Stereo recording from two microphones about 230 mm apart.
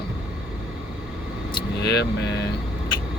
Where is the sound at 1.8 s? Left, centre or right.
Left.